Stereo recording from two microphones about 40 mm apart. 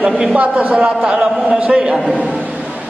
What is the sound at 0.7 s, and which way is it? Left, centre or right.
A man's voice, right.